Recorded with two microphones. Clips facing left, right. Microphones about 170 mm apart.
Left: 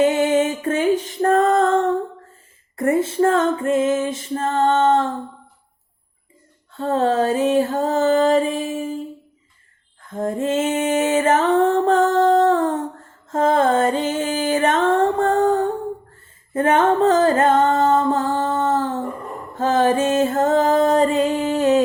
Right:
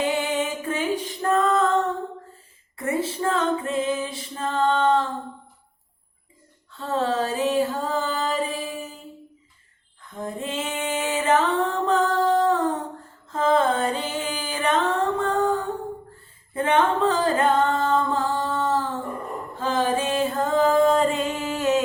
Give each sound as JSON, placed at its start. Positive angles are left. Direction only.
{"t": 0.0, "sound": "music", "side_deg": 40}
{"t": 2.7, "sound": "female singing", "side_deg": 50}
{"t": 6.7, "sound": "music", "side_deg": 40}
{"t": 10.1, "sound": "a sound", "side_deg": 45}
{"t": 13.3, "sound": "music", "side_deg": 45}